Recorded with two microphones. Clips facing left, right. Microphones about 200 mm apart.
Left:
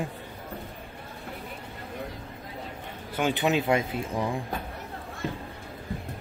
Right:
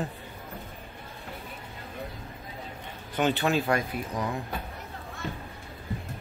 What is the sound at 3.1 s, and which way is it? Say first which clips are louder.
Speech: even; 10° left (ahead or behind).